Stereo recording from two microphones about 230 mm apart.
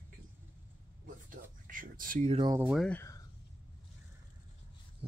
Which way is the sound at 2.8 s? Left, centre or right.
Centre.